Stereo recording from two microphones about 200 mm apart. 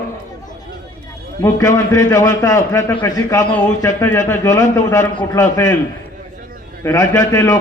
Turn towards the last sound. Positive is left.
turn(degrees=15)  # may be behind; listen again after turning